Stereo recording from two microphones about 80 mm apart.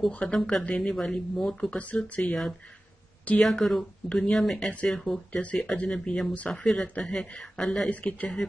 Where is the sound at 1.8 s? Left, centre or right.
Centre.